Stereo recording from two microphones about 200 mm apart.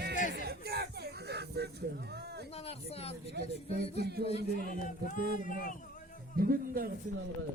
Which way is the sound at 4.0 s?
50° right (ahead or behind).